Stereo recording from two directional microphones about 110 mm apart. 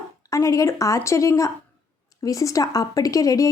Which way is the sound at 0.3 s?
30° left (ahead or behind).